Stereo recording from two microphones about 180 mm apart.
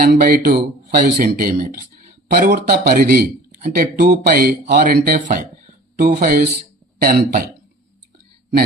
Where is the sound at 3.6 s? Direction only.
45° right (ahead or behind).